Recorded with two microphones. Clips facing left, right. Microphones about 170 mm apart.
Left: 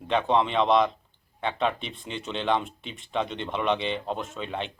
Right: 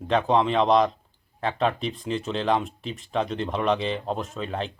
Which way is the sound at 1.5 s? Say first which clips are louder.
Right 3 dB; 35° right (ahead or behind).